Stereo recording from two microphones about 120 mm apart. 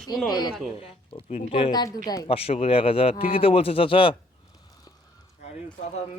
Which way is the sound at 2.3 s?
55° left (ahead or behind).